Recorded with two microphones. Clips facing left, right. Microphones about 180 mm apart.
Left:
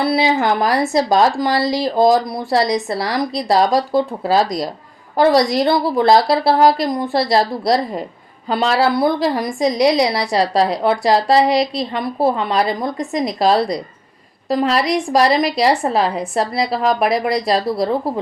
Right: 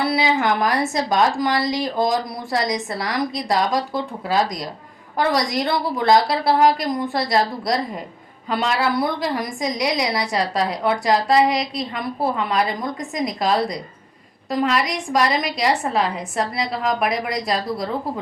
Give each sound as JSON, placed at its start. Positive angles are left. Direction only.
{"t": 0.1, "sound": "a woman's voice", "side_deg": 30}